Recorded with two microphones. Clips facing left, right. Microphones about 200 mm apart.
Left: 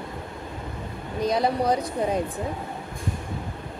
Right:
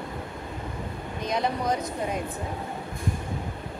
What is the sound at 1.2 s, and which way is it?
Speech, 35° left (ahead or behind).